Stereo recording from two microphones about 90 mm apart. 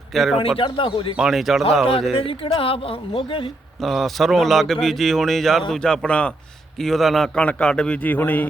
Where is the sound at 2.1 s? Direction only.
90° left.